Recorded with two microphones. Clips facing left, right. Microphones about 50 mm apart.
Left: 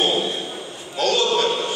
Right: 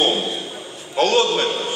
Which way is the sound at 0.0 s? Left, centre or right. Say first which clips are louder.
Right 1 dB; right.